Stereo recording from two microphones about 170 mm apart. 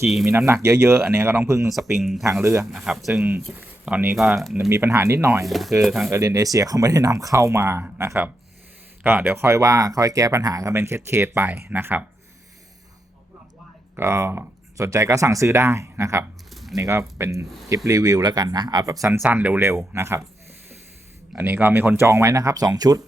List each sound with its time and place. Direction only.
0.3 s speech: 15° right (ahead or behind)
2.0 s speech: centre (ahead or behind)
2.2 s speech: 15° right (ahead or behind)
2.7 s speech: centre (ahead or behind)
4.7 s speech: 15° right (ahead or behind)
5.5 s speech: centre (ahead or behind)
6.1 s speech: 20° right (ahead or behind)
13.9 s speech: 15° right (ahead or behind)
16.5 s a sound: centre (ahead or behind)
16.7 s speech: 15° right (ahead or behind)
21.3 s speech: 10° right (ahead or behind)